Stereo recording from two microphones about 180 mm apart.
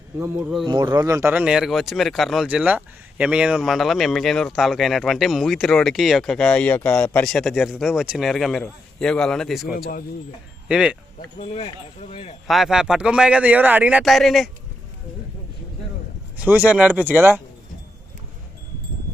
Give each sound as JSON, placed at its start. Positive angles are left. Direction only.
{"t": 0.2, "sound": "speech", "side_deg": -10}
{"t": 0.6, "sound": "speech", "side_deg": -25}
{"t": 11.3, "sound": "speech", "side_deg": 30}
{"t": 12.5, "sound": "speech", "side_deg": 0}
{"t": 16.4, "sound": "speech", "side_deg": -10}